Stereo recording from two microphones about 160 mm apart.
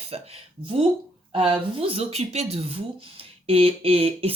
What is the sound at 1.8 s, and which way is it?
Speech, 35° right (ahead or behind).